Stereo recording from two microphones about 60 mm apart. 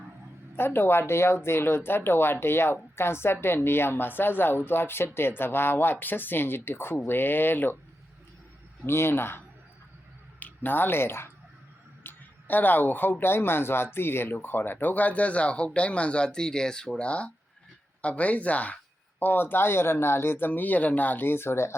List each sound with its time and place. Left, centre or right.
0.5 s a woman's voice: left
8.9 s speech: left
10.4 s speech: left
12.0 s speech: left
19.2 s speech: left